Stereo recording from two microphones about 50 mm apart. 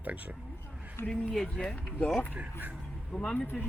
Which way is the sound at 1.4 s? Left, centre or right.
Centre.